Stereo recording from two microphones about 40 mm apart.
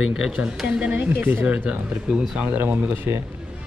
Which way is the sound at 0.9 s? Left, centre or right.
Right.